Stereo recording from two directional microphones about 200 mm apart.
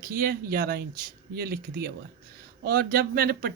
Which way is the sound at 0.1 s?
50° right (ahead or behind).